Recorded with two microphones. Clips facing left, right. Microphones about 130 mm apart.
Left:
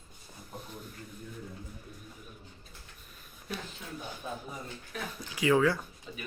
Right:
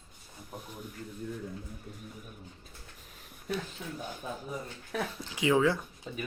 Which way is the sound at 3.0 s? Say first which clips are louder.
Right 2 dB; 90° right.